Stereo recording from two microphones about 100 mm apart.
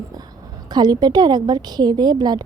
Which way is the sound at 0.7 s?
45° right (ahead or behind).